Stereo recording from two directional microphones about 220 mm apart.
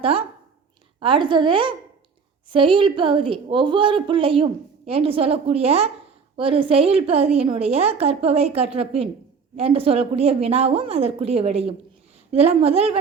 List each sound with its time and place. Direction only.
0.0 s a woman's voice: 25° right (ahead or behind)